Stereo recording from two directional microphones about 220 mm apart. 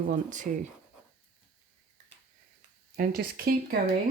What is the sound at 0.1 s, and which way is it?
Speech, 35° right (ahead or behind).